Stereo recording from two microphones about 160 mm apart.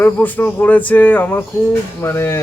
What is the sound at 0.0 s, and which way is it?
A man's voice, 10° left (ahead or behind).